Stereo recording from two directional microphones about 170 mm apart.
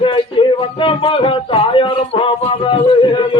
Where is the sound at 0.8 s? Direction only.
30° left (ahead or behind).